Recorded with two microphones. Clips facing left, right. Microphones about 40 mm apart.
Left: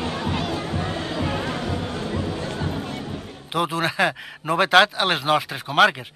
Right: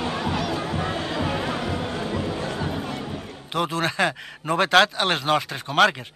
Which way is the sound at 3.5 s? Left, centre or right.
Centre.